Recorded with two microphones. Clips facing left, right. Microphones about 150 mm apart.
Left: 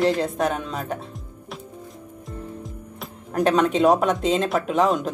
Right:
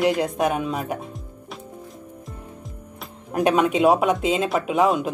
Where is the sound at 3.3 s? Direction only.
10° right (ahead or behind).